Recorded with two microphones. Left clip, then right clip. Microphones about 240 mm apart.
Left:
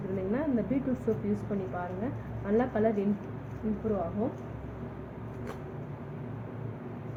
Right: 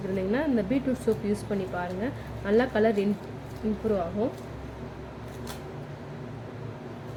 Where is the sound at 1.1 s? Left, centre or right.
Right.